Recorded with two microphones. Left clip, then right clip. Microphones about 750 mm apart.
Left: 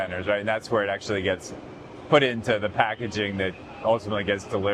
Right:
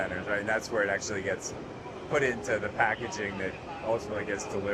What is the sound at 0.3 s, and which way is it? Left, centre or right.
Speech, left.